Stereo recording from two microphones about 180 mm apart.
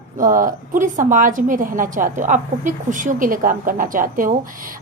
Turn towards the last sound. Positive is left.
turn(degrees=-50)  # may be behind; listen again after turning